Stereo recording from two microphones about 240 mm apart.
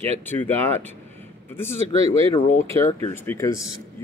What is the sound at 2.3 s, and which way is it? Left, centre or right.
Speech, left.